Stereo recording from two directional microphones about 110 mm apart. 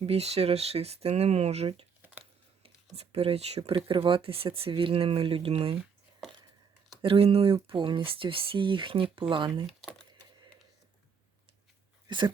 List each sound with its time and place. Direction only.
0.0 s speech: 70° right (ahead or behind)
2.9 s speech: 70° right (ahead or behind)
7.0 s speech: 60° right (ahead or behind)
12.0 s speech: 45° right (ahead or behind)